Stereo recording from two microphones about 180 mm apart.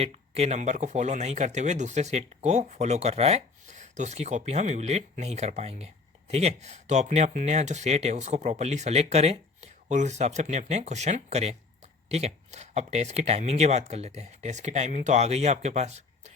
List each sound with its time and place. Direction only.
0.0 s speech: 35° right (ahead or behind)